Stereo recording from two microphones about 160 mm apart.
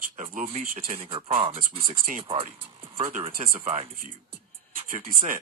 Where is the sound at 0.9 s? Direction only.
35° right (ahead or behind).